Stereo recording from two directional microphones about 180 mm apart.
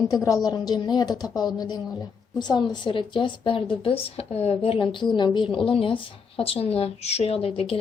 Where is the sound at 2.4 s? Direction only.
25° left (ahead or behind).